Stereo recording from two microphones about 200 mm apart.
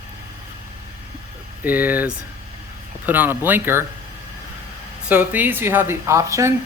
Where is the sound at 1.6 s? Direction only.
10° right (ahead or behind).